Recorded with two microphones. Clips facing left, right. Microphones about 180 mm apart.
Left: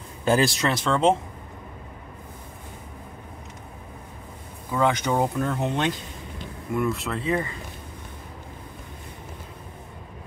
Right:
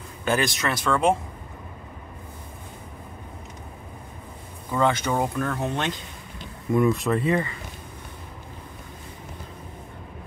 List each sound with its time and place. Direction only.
0.2 s speech: 30° left (ahead or behind)
4.6 s speech: 5° left (ahead or behind)
4.9 s speech: 15° left (ahead or behind)
6.8 s speech: 15° right (ahead or behind)